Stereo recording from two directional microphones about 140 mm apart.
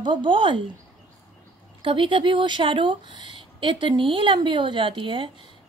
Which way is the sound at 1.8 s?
35° right (ahead or behind).